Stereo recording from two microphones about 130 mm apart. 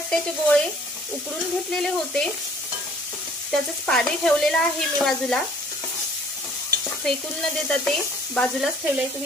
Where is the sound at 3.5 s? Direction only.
5° left (ahead or behind).